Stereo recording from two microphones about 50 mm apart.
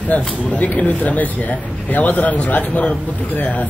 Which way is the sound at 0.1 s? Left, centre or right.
Left.